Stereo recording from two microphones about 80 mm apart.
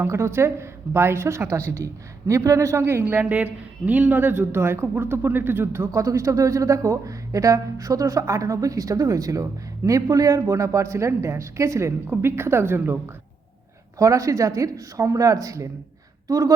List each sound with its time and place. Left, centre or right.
0.0 s a woman's voice: right
3.2 s speech: centre
5.9 s speech: right
12.0 s a woman's voice: right
14.0 s speech: right